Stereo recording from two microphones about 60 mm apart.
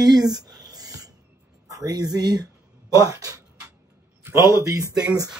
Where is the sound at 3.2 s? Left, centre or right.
Right.